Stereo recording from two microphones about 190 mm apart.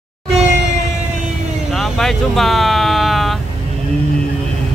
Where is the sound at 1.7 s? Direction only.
Centre (ahead or behind).